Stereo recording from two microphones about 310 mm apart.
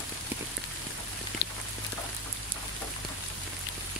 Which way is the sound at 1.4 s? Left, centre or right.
Left.